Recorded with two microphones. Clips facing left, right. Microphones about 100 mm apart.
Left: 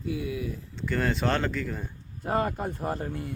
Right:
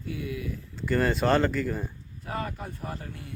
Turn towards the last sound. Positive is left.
turn(degrees=40)  # may be behind; listen again after turning